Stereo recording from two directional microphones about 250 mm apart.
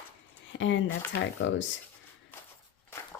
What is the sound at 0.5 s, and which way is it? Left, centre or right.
Speech, left.